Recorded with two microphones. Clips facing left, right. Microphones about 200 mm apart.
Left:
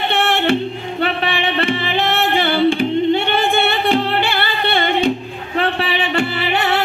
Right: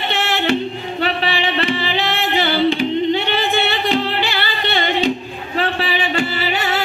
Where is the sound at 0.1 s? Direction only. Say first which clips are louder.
Left 2 dB; 55° left (ahead or behind).